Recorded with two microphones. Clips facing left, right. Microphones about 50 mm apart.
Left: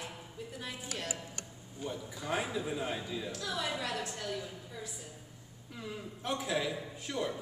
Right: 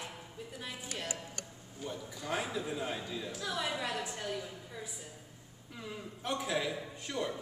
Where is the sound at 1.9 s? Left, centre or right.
Centre.